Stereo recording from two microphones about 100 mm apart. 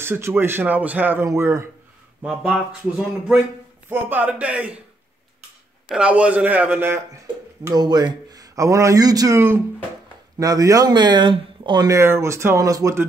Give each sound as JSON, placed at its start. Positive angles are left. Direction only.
{"t": 0.0, "sound": "speech", "side_deg": -25}
{"t": 1.2, "sound": "speech", "side_deg": -30}
{"t": 2.5, "sound": "a man's voice", "side_deg": -10}
{"t": 5.9, "sound": "a man's voice", "side_deg": -10}
{"t": 7.7, "sound": "speech", "side_deg": -45}
{"t": 10.4, "sound": "speech", "side_deg": -35}
{"t": 11.8, "sound": "speech", "side_deg": -30}